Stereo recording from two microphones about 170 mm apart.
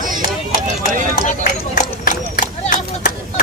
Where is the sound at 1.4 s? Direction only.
50° left (ahead or behind).